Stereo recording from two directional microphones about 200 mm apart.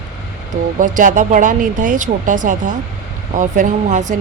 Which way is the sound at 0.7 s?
40° right (ahead or behind).